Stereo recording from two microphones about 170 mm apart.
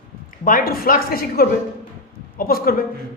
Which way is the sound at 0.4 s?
55° left (ahead or behind).